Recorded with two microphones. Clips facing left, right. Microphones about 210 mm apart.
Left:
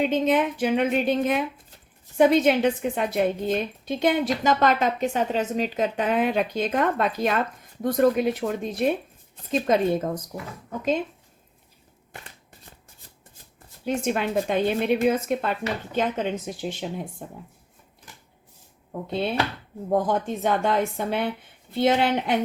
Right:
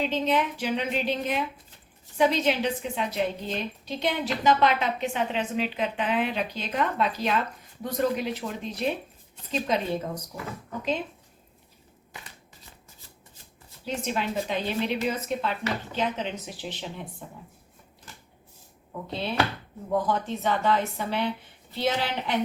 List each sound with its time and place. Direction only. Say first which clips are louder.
0.0 s a woman's voice: left 4 dB; 50° left (ahead or behind)
13.8 s a woman's voice: left 5 dB; 55° left (ahead or behind)
20.1 s a woman's voice: left 3 dB; 50° left (ahead or behind)